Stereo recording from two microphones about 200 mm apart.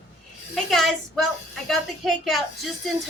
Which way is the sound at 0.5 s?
Centre (ahead or behind).